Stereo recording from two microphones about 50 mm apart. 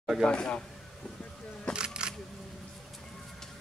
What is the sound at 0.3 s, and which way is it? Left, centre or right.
Speech, left.